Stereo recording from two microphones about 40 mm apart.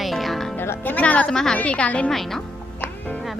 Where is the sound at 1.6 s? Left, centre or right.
Left.